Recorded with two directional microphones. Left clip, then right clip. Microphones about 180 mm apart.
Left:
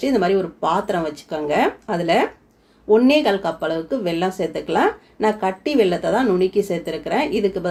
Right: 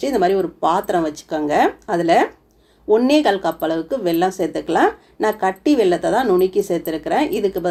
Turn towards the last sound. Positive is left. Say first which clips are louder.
# right 1 dB
turn(degrees=-30)  # may be behind; listen again after turning